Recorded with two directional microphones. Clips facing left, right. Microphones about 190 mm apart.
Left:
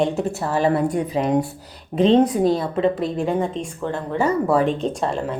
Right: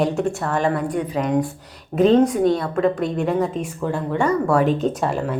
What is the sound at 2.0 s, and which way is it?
Speech, 25° left (ahead or behind).